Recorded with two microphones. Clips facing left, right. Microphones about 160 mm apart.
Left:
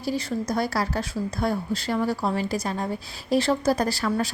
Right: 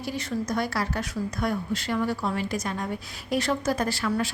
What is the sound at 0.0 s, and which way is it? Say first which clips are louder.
Speech: left 3 dB; 35° left (ahead or behind).